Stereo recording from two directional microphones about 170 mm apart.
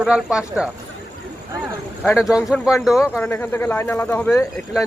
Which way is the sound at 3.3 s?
15° left (ahead or behind).